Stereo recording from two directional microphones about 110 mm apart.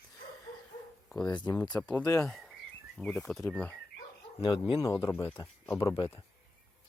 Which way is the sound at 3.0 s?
Centre (ahead or behind).